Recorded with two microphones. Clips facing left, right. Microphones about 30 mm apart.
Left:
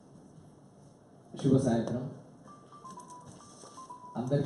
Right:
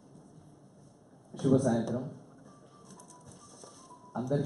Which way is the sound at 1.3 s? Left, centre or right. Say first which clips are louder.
Even; centre.